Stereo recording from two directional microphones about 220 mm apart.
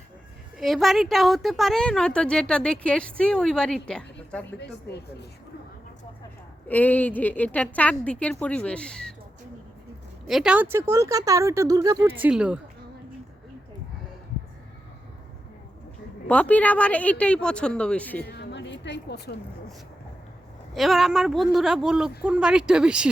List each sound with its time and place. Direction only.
0.6 s a woman's voice: centre (ahead or behind)
6.7 s a woman's voice: 10° left (ahead or behind)
10.2 s speech: centre (ahead or behind)
16.2 s a woman's voice: 5° left (ahead or behind)
18.3 s a sound: 50° left (ahead or behind)
20.7 s a woman's voice: centre (ahead or behind)